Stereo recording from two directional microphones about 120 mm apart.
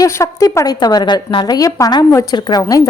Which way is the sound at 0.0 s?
30° left (ahead or behind).